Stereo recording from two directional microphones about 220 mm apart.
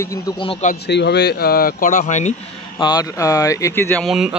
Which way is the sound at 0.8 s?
50° left (ahead or behind).